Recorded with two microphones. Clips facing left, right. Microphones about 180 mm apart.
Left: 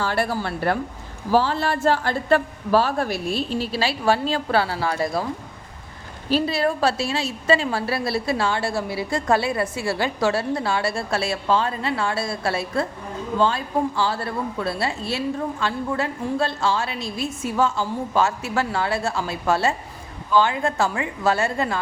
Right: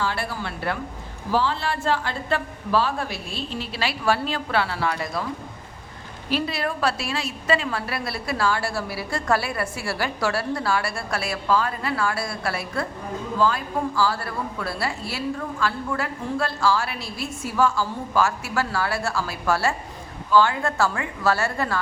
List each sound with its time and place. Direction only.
0.0 s a man's voice: 45° left (ahead or behind)
6.3 s a woman's voice: 30° left (ahead or behind)